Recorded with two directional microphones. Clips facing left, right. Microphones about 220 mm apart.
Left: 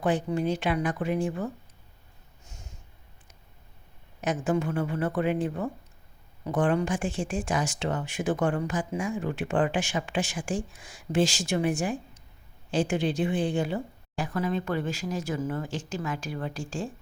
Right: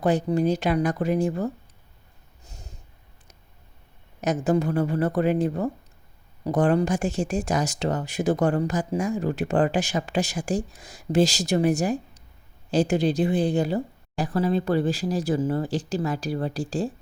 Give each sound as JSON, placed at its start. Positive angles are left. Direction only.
{"t": 0.0, "sound": "speech", "side_deg": -40}
{"t": 2.4, "sound": "snort", "side_deg": -35}
{"t": 4.2, "sound": "speech", "side_deg": -40}